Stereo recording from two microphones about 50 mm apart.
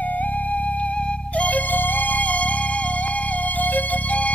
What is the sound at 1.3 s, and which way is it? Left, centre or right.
Music, left.